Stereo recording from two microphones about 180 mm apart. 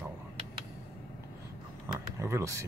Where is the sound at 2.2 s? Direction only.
15° right (ahead or behind).